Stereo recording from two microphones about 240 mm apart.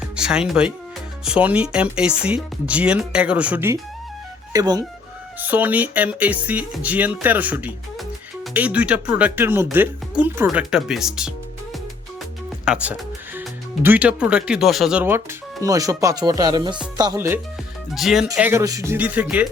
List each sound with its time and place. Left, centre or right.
0.0 s speech: centre